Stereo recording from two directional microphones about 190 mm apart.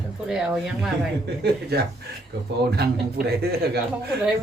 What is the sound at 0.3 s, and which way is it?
Speech, 5° right (ahead or behind).